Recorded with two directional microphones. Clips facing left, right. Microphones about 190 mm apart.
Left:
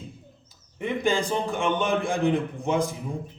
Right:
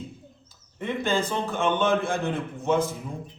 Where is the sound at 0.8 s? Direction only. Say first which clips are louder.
Left 1 dB; 15° left (ahead or behind).